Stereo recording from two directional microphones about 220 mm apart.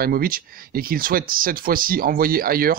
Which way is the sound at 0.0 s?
40° right (ahead or behind).